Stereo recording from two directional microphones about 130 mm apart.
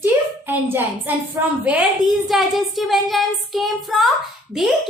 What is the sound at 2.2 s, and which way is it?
A woman's voice, centre (ahead or behind).